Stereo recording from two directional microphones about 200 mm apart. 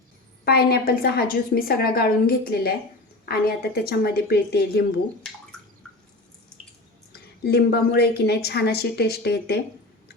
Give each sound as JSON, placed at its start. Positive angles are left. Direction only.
{"t": 0.4, "sound": "a woman's voice", "side_deg": 50}
{"t": 7.4, "sound": "a woman's voice", "side_deg": 55}